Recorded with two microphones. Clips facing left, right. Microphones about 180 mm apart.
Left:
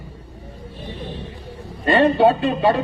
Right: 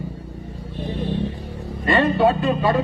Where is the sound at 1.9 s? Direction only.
30° left (ahead or behind).